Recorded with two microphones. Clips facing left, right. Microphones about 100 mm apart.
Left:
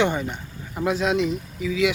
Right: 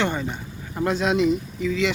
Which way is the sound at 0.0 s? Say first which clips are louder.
Left 2 dB; 15° left (ahead or behind).